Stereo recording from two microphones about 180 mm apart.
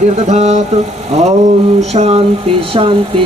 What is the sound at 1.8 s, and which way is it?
Speech, 35° right (ahead or behind).